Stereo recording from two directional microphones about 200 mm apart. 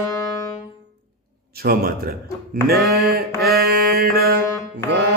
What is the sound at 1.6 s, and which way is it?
Mantra, 50° right (ahead or behind).